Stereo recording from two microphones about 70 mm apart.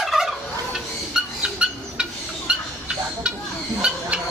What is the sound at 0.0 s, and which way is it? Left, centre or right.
Turkey, centre.